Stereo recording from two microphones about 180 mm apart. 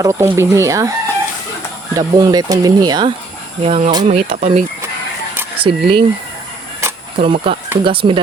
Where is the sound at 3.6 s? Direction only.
35° right (ahead or behind).